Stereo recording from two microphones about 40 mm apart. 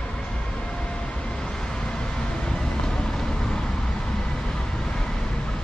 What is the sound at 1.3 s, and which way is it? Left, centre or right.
Vehicle, centre.